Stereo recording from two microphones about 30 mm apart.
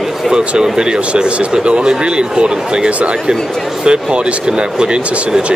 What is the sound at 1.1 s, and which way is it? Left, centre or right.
Speech, right.